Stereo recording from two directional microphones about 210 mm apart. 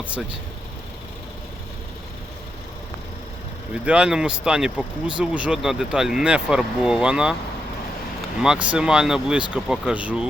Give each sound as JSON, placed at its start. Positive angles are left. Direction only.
{"t": 3.8, "sound": "speech", "side_deg": -5}
{"t": 8.4, "sound": "speech", "side_deg": -5}